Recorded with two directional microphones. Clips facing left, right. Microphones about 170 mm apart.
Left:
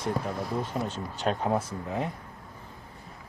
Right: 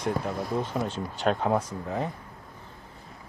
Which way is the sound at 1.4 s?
5° left (ahead or behind).